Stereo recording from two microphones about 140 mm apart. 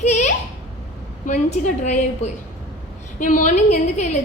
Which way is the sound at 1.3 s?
55° left (ahead or behind).